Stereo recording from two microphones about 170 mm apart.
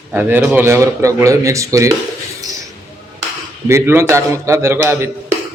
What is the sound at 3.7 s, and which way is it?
Speech, 15° right (ahead or behind).